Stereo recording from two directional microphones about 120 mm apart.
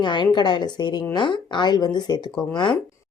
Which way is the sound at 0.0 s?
40° left (ahead or behind).